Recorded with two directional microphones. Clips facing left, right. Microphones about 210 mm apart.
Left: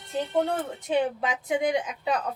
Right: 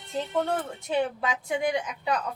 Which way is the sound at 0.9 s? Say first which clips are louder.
Left 1 dB; 20° left (ahead or behind).